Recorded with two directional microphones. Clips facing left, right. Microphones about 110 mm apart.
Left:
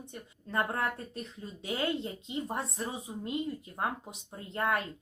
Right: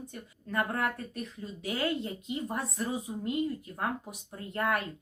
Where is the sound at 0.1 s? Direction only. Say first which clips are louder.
Left 2 dB; 30° left (ahead or behind).